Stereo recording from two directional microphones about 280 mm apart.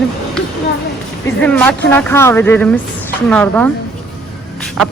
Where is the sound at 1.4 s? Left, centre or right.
Centre.